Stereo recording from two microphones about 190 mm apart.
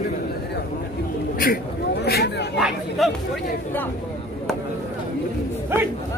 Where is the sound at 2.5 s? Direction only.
Centre (ahead or behind).